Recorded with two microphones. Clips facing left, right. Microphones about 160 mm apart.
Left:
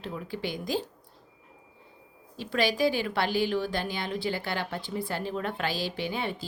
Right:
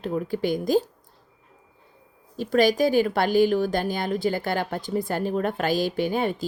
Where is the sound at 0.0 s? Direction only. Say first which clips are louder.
Right 9 dB; 45° right (ahead or behind).